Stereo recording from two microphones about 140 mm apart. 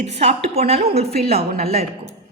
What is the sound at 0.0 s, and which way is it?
Speech, 50° right (ahead or behind).